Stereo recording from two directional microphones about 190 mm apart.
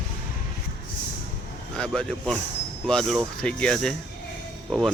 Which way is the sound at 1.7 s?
5° left (ahead or behind).